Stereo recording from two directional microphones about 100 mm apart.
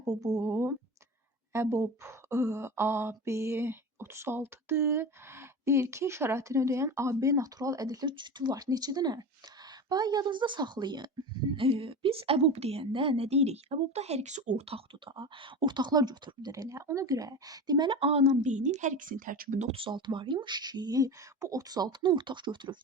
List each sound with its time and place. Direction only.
0.0 s speech: 35° right (ahead or behind)
8.1 s speech: 50° right (ahead or behind)
11.5 s a woman's voice: 65° right (ahead or behind); by 14.8 s 90° right
15.0 s speech: 55° right (ahead or behind); by 18.3 s 85° right
19.6 s speech: 65° right (ahead or behind)